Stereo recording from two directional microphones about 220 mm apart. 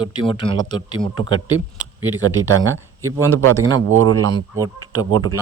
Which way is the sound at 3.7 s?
65° right (ahead or behind).